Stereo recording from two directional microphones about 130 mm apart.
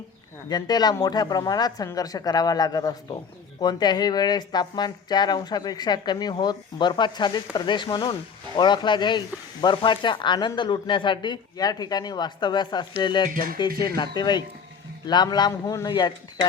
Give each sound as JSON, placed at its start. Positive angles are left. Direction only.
{"t": 0.4, "sound": "speech", "side_deg": 30}